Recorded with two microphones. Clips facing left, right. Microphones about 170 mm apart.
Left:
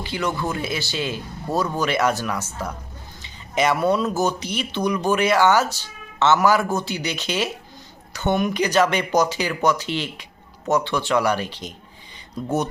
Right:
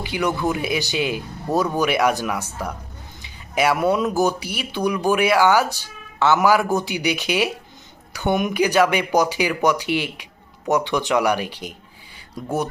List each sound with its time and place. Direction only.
0.0 s speech: 15° right (ahead or behind)
3.2 s a sound: 10° right (ahead or behind)
4.2 s speech: 10° right (ahead or behind)